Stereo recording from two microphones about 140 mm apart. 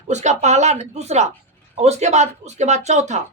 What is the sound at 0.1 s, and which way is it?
Speech, 55° right (ahead or behind).